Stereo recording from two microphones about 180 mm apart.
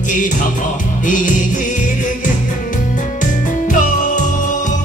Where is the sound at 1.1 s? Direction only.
45° left (ahead or behind).